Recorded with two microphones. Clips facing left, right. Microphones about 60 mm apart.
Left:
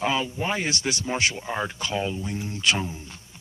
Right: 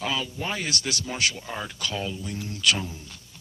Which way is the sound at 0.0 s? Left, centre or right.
Left.